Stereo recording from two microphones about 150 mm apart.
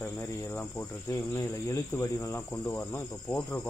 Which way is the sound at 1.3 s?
20° left (ahead or behind).